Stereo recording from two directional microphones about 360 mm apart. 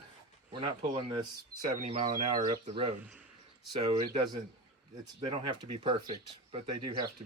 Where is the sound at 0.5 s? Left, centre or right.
Centre.